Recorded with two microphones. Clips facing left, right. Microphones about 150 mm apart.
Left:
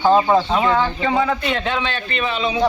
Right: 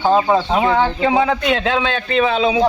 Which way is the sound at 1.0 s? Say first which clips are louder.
Right 3 dB; 70° right (ahead or behind).